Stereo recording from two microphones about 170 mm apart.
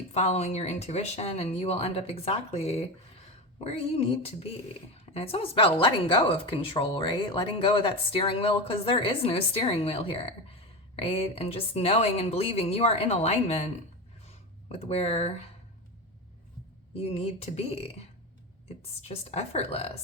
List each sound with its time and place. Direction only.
0.1 s speech: 40° left (ahead or behind)
14.3 s a sound: 35° left (ahead or behind)
16.9 s speech: 35° left (ahead or behind)